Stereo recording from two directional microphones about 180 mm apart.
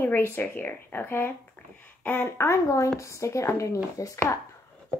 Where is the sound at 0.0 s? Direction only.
10° left (ahead or behind).